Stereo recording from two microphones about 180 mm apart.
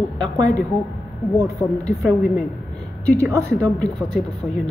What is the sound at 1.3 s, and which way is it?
Speech, 15° left (ahead or behind).